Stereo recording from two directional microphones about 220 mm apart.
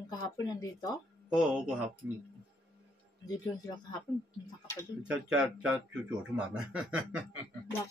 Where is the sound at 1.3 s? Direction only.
5° right (ahead or behind).